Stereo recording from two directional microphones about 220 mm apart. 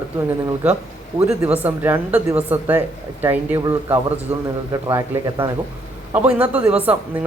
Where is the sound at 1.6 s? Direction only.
10° right (ahead or behind).